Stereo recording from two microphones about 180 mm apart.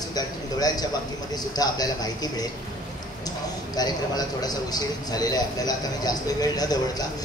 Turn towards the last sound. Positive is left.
turn(degrees=20)  # may be behind; listen again after turning